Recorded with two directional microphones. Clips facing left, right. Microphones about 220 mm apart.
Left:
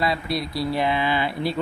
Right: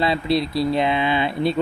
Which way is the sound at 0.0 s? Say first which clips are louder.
Right 5 dB; 25° right (ahead or behind).